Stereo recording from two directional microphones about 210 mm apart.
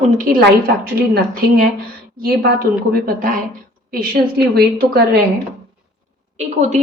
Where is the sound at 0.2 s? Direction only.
45° right (ahead or behind).